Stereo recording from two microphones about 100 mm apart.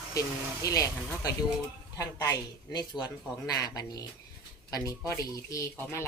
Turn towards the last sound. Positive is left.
turn(degrees=30)  # may be behind; listen again after turning